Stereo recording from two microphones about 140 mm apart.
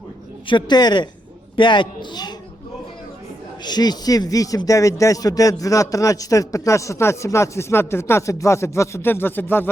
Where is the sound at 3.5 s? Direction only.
30° left (ahead or behind).